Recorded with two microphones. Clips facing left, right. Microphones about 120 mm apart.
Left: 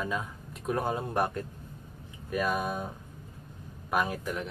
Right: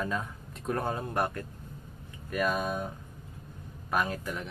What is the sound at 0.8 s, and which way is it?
Speech, 20° left (ahead or behind).